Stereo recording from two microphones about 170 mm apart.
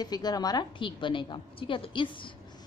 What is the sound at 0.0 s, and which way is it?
Speech, 25° left (ahead or behind).